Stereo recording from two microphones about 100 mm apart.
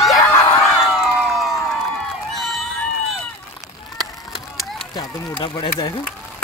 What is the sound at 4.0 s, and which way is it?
Run, centre (ahead or behind).